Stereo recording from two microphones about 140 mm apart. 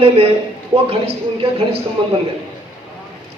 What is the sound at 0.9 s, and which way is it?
Speech, 45° right (ahead or behind).